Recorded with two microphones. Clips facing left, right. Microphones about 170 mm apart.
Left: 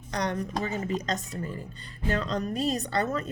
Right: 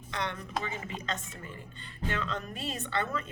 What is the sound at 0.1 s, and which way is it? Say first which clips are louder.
A woman's voice: left 6 dB; 40° left (ahead or behind).